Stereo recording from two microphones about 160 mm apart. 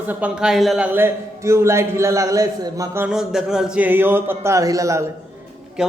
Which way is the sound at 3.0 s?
5° right (ahead or behind).